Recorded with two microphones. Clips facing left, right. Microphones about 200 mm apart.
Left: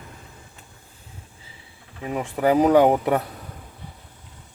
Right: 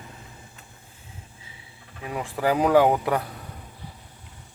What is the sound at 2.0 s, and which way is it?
Speech, 20° left (ahead or behind).